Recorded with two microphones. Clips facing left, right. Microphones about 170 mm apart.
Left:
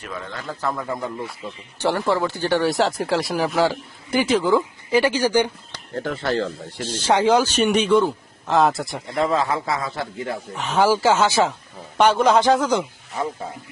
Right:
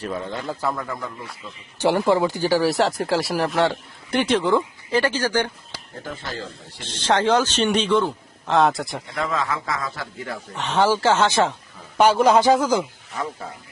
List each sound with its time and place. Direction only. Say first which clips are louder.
0.0 s a man's voice: right 5 dB; 30° right (ahead or behind)
0.4 s speech: left 3 dB; centre (ahead or behind)
1.8 s speech: right 2 dB; 15° right (ahead or behind); by 5.5 s 10° left (ahead or behind)
6.0 s speech: left 9 dB; 65° left (ahead or behind)
6.8 s a man's voice: left 2 dB; 10° left (ahead or behind)
9.1 s speech: left 5 dB; 30° left (ahead or behind)
10.5 s a man's voice: left 1 dB; 5° left (ahead or behind)
11.9 s speech: right 1 dB; 5° right (ahead or behind)